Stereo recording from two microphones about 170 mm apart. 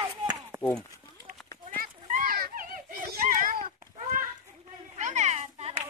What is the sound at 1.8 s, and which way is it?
Children playing, 55° right (ahead or behind).